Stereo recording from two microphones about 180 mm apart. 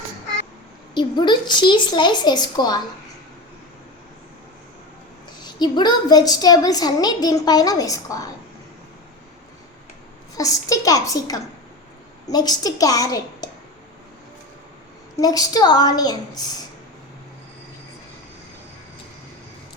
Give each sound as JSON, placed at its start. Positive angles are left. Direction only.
{"t": 0.9, "sound": "a woman's voice", "side_deg": 25}
{"t": 5.4, "sound": "a woman's voice", "side_deg": 25}
{"t": 10.3, "sound": "a woman's voice", "side_deg": 20}
{"t": 15.2, "sound": "a woman's voice", "side_deg": 20}